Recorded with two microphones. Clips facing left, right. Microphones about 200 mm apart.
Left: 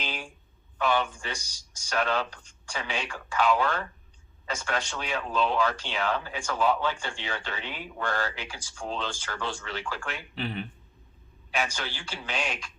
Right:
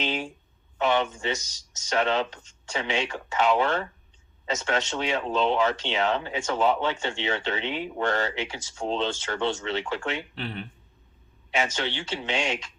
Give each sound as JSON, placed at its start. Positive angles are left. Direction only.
{"t": 0.0, "sound": "speech", "side_deg": -25}
{"t": 10.3, "sound": "speech", "side_deg": 0}
{"t": 11.5, "sound": "speech", "side_deg": -25}